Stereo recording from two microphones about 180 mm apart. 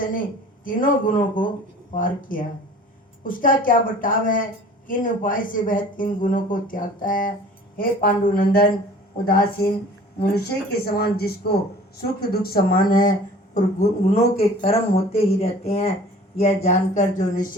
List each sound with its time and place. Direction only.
0.6 s speech: 50° left (ahead or behind)